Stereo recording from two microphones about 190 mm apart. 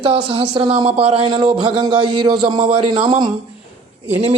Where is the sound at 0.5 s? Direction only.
30° right (ahead or behind).